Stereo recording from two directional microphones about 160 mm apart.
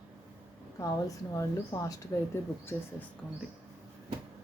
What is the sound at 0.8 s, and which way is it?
Speech, 20° left (ahead or behind).